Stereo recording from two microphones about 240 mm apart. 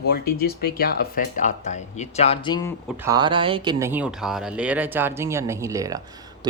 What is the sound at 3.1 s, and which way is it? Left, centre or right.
Speech, centre.